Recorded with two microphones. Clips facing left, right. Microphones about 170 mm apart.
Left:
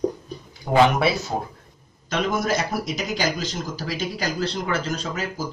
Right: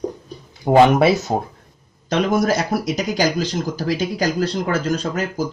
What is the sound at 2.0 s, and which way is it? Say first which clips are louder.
Speech: right 6 dB; 40° right (ahead or behind).